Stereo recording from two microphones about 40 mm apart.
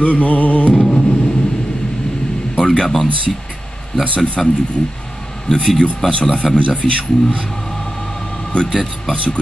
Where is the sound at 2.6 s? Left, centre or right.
Centre.